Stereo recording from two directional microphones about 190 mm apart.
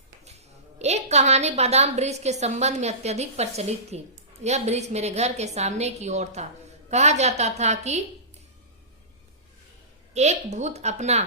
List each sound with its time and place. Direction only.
0.3 s a woman's voice: 35° right (ahead or behind)
10.2 s a woman's voice: 35° right (ahead or behind)